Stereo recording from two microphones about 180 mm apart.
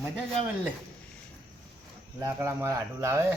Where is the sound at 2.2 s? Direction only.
15° right (ahead or behind).